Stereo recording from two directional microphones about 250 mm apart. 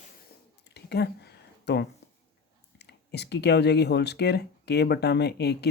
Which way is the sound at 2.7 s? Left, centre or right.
Left.